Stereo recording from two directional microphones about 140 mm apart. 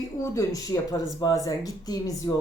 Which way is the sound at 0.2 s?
25° left (ahead or behind).